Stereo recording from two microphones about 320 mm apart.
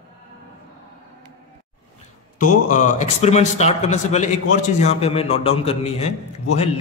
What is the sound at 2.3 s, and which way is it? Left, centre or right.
A man's voice, left.